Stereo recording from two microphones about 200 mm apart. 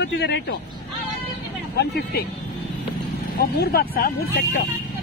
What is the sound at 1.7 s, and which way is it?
Speech, 55° left (ahead or behind).